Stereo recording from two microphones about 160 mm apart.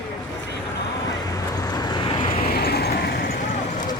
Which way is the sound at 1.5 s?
25° left (ahead or behind).